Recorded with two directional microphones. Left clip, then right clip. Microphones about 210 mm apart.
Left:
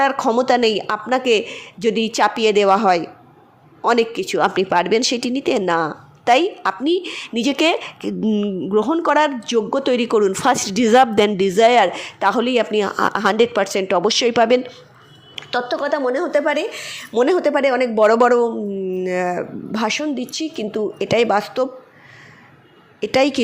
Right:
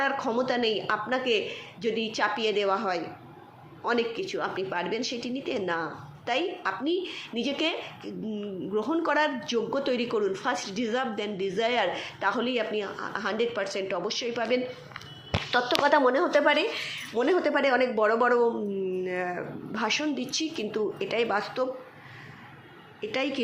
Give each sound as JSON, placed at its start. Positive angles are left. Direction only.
{"t": 0.0, "sound": "a woman's voice", "side_deg": 55}
{"t": 15.8, "sound": "speech", "side_deg": 10}
{"t": 16.1, "sound": "a woman's voice", "side_deg": 25}
{"t": 16.8, "sound": "speech", "side_deg": 45}
{"t": 23.0, "sound": "a woman's voice", "side_deg": 50}